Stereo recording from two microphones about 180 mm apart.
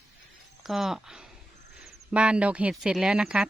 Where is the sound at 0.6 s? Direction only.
Centre (ahead or behind).